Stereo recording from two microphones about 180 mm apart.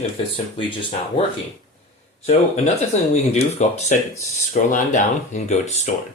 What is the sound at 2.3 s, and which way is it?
Speech, 40° left (ahead or behind).